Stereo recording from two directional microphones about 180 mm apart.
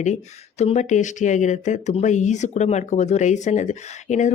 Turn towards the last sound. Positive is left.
turn(degrees=40)  # may be behind; listen again after turning